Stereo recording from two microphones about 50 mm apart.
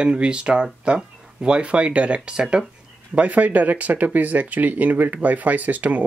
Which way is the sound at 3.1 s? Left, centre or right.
Right.